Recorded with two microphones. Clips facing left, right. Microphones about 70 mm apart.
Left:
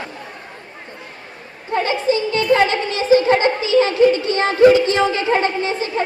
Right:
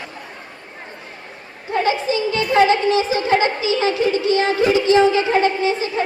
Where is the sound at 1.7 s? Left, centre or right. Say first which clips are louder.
Left 1 dB; left.